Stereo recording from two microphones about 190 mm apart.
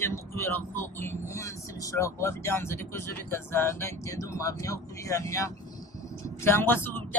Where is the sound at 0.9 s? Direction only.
15° left (ahead or behind).